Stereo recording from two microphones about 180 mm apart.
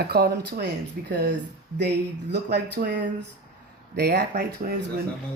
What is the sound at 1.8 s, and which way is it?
Speech, 70° right (ahead or behind).